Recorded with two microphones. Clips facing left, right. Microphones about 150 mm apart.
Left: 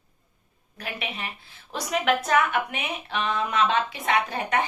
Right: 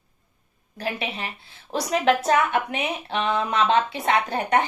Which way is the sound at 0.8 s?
35° right (ahead or behind).